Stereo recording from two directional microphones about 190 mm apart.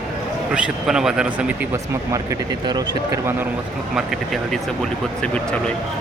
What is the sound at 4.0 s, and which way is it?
Speech, centre (ahead or behind).